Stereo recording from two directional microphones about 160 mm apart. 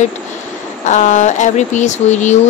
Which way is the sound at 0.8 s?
50° left (ahead or behind).